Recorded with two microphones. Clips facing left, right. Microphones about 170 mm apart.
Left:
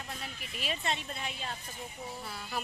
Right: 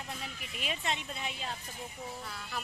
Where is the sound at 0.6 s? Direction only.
15° right (ahead or behind).